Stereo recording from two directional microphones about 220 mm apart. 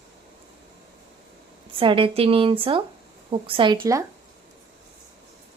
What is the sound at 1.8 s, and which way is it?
Speech, 25° right (ahead or behind).